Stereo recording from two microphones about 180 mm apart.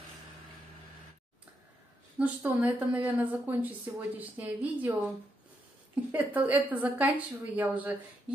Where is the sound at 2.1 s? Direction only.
10° right (ahead or behind).